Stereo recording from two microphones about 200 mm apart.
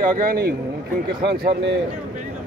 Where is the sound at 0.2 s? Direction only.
45° right (ahead or behind).